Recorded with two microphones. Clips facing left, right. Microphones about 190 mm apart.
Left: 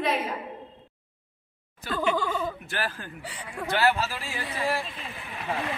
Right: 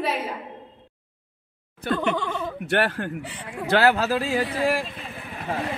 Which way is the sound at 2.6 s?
70° right (ahead or behind).